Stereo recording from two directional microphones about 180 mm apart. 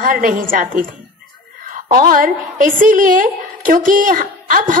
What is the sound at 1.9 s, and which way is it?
A woman's voice, 50° right (ahead or behind).